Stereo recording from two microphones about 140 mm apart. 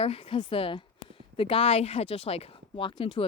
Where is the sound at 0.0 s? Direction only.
40° left (ahead or behind).